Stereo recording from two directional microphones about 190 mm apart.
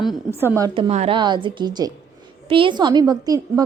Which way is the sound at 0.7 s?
30° right (ahead or behind).